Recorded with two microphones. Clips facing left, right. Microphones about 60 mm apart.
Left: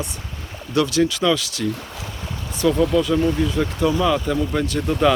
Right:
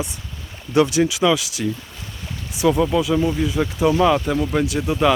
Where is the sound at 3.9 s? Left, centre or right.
Centre.